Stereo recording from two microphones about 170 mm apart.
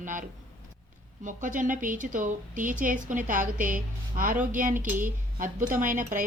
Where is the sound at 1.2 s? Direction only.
50° right (ahead or behind).